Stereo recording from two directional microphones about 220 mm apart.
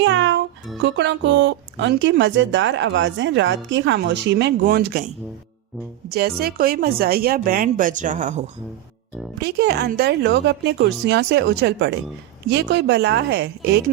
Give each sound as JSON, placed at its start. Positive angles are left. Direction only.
{"t": 0.0, "sound": "music", "side_deg": -55}
{"t": 0.8, "sound": "speech", "side_deg": -50}
{"t": 6.1, "sound": "a woman's voice", "side_deg": -45}
{"t": 9.4, "sound": "speech", "side_deg": -45}